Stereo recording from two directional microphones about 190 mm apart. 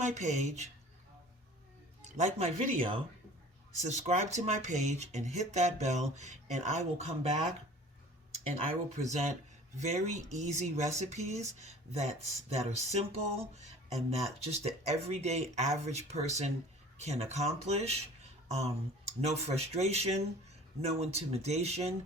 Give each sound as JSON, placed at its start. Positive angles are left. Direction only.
{"t": 0.0, "sound": "speech", "side_deg": -40}
{"t": 2.1, "sound": "speech", "side_deg": -35}
{"t": 9.7, "sound": "speech", "side_deg": -35}